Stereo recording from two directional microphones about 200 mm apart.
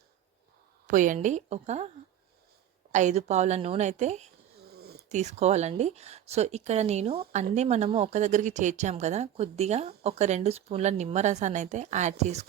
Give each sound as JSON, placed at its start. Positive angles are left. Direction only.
{"t": 0.9, "sound": "speech", "side_deg": -40}
{"t": 2.9, "sound": "speech", "side_deg": -35}
{"t": 4.7, "sound": "a sound", "side_deg": -50}
{"t": 5.0, "sound": "speech", "side_deg": -35}